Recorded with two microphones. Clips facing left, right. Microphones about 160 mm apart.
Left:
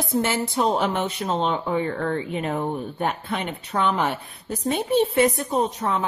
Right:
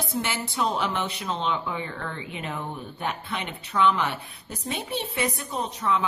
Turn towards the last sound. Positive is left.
turn(degrees=45)  # may be behind; listen again after turning